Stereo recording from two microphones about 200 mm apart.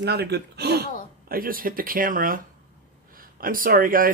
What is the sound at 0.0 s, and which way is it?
Speech, 55° right (ahead or behind).